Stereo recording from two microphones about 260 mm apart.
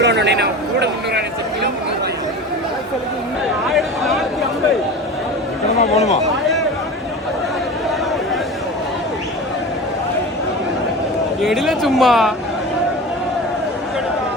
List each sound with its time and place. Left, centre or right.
0.0 s speech: right
3.7 s a sound: centre
5.9 s speech: left
11.3 s a man's voice: centre